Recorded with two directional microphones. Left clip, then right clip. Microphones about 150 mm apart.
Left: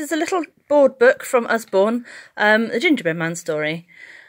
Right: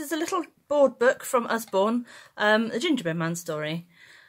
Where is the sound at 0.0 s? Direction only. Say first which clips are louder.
Left 7 dB; 30° left (ahead or behind).